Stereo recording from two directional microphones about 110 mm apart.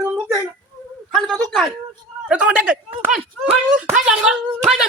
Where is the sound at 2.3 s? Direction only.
10° right (ahead or behind).